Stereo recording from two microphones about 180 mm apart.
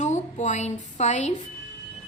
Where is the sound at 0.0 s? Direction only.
40° left (ahead or behind).